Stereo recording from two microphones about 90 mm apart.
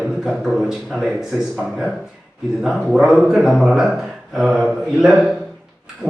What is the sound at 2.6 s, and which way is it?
A man's voice, centre (ahead or behind).